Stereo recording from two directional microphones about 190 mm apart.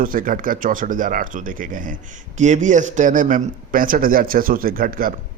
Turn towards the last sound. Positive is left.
turn(degrees=-50)  # may be behind; listen again after turning